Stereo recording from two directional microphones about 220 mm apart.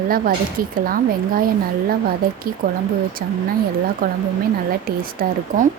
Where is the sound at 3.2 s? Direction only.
40° right (ahead or behind).